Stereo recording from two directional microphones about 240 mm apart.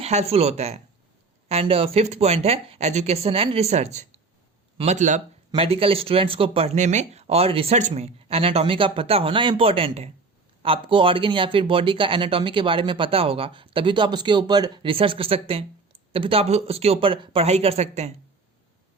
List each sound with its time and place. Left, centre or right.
0.0 s speech: right